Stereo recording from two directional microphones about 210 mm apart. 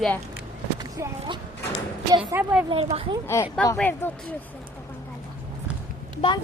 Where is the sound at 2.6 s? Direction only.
25° right (ahead or behind).